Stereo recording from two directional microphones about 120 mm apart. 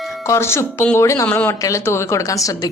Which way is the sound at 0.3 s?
20° left (ahead or behind).